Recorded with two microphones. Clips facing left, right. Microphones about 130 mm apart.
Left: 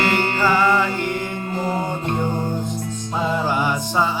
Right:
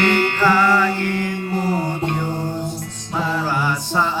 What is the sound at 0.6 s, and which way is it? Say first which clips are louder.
Mantra: right 1 dB; 20° left (ahead or behind).